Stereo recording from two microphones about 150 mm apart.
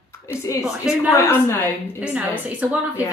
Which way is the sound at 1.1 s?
20° left (ahead or behind).